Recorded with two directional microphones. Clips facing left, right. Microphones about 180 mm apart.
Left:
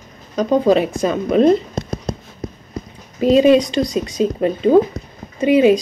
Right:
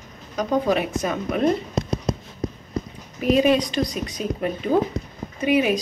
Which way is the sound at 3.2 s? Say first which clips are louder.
Left 7 dB; 25° left (ahead or behind).